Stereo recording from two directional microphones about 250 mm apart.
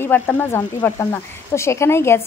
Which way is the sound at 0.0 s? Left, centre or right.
Centre.